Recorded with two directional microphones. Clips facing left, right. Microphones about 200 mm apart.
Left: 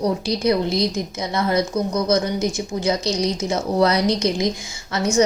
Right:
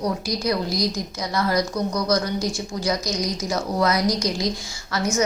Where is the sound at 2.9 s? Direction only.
25° left (ahead or behind).